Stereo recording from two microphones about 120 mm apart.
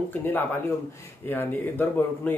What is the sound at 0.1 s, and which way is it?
Speech, 15° left (ahead or behind).